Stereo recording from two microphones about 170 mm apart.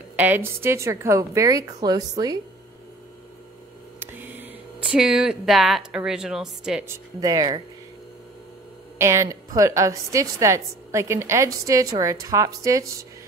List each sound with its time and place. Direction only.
0.1 s a woman's voice: 10° right (ahead or behind)
4.0 s speech: 10° right (ahead or behind)
6.9 s speech: 20° right (ahead or behind)
8.9 s a woman's voice: 15° right (ahead or behind)